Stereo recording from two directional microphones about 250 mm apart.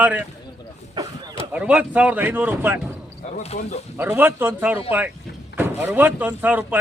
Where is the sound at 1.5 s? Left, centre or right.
Centre.